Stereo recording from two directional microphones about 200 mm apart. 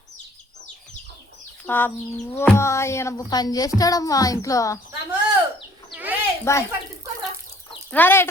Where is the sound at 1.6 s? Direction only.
10° left (ahead or behind).